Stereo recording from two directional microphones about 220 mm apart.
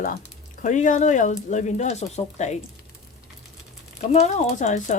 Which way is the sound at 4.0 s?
30° left (ahead or behind).